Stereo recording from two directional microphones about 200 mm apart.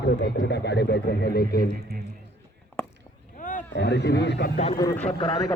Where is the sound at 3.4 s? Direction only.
40° left (ahead or behind).